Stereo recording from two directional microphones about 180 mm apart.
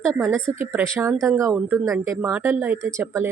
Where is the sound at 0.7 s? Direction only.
15° right (ahead or behind).